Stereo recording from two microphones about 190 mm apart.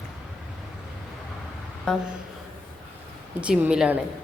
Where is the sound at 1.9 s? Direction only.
5° left (ahead or behind).